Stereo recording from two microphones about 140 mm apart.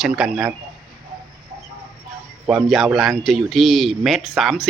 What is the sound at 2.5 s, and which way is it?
A man's voice, 5° right (ahead or behind).